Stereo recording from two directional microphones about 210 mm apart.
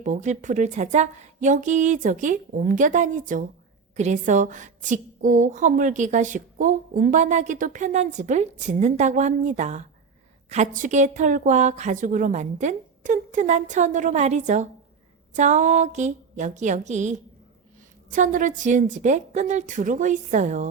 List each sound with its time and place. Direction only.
0.0 s a woman's voice: 35° right (ahead or behind)